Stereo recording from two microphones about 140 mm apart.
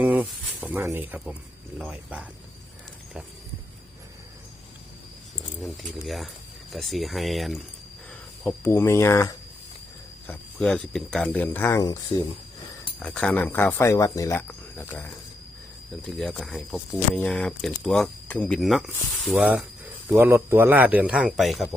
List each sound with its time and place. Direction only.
0.0 s a man's voice: 10° right (ahead or behind)
5.5 s speech: centre (ahead or behind)
8.4 s speech: 15° left (ahead or behind)
10.2 s speech: 10° left (ahead or behind)
12.1 s speech: 30° left (ahead or behind)
13.0 s speech: 10° left (ahead or behind)
13.9 s speech: 25° left (ahead or behind)
16.0 s speech: centre (ahead or behind)
20.1 s a man's voice: 15° right (ahead or behind)